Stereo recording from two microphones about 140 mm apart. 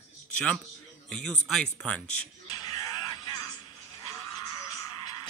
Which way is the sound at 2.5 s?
30° left (ahead or behind).